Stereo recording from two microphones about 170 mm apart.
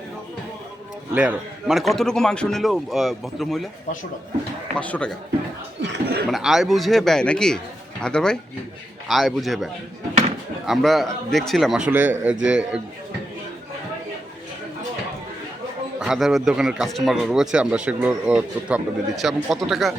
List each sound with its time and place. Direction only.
1.1 s speech: 5° right (ahead or behind)
4.8 s speech: 5° left (ahead or behind)
5.8 s chuckle: 80° right
6.3 s speech: centre (ahead or behind)
10.7 s speech: centre (ahead or behind)
16.0 s speech: centre (ahead or behind)